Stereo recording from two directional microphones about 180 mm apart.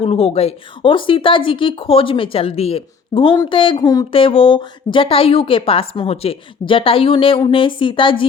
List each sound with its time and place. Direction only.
0.0 s a woman's voice: 35° left (ahead or behind)